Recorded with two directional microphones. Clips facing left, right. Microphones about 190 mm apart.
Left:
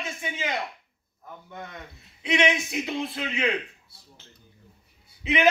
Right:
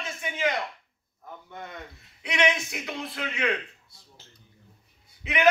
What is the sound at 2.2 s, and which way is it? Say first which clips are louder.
A man's voice: left 2 dB; 25° left (ahead or behind).